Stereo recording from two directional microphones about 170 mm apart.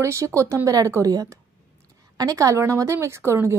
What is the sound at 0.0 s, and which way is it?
A woman's voice, 15° right (ahead or behind).